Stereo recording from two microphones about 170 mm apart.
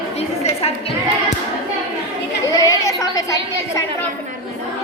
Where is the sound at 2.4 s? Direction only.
20° left (ahead or behind).